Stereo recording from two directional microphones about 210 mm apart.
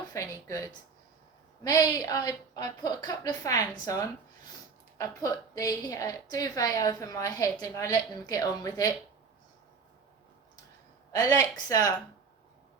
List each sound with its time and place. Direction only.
0.1 s a sound: 15° left (ahead or behind)
1.6 s a woman's voice: 15° left (ahead or behind)
11.1 s a woman's voice: 15° left (ahead or behind)